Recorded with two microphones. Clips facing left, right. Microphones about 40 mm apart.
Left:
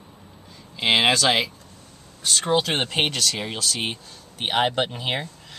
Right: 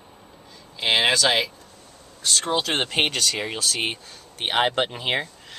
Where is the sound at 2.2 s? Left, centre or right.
Centre.